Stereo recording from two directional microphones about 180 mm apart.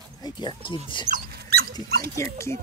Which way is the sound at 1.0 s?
50° right (ahead or behind).